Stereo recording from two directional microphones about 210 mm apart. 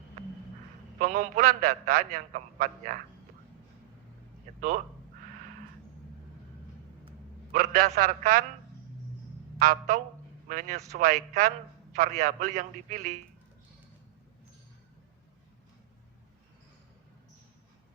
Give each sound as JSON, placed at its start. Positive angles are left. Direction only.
{"t": 0.9, "sound": "a man's voice", "side_deg": -35}
{"t": 7.5, "sound": "a man's voice", "side_deg": -40}
{"t": 9.6, "sound": "a man's voice", "side_deg": -40}